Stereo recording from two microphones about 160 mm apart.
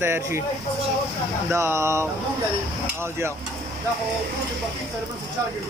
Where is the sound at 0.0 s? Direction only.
15° right (ahead or behind).